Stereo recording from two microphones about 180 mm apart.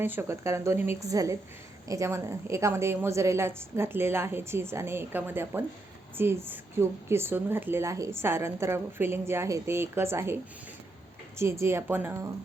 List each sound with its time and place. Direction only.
0.0 s speech: 10° right (ahead or behind)
11.6 s speech: 15° right (ahead or behind)